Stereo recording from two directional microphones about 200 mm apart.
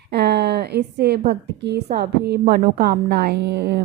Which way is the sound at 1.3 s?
55° right (ahead or behind).